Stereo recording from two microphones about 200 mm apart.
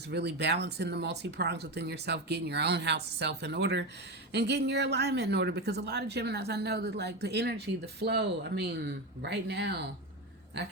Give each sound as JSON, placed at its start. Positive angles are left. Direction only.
{"t": 0.1, "sound": "speech", "side_deg": -55}